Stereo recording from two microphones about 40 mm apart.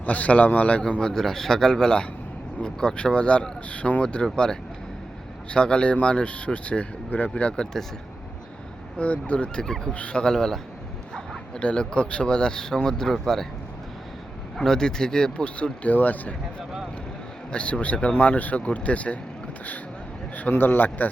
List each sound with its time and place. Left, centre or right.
0.0 s speech: left
1.1 s a man's voice: centre; by 4.0 s left
4.0 s speech: left
9.0 s speech: left
9.6 s a man's voice: centre
9.9 s speech: left
10.2 s a man's voice: centre
11.6 s a man's voice: left; by 13.5 s centre
14.5 s speech: centre; by 16.3 s left
17.5 s speech: left
20.5 s a man's voice: left